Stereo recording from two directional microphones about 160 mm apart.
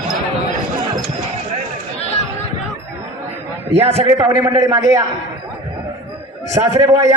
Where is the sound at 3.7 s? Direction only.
40° right (ahead or behind).